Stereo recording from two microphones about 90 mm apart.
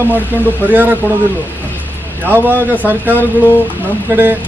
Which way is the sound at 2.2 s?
20° right (ahead or behind).